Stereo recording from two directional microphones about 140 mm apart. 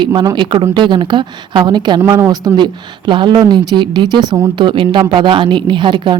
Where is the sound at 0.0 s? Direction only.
30° right (ahead or behind).